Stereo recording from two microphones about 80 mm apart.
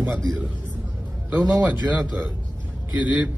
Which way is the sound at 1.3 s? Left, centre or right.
Centre.